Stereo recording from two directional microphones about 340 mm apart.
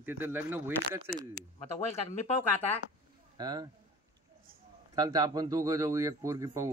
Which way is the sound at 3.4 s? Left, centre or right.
Centre.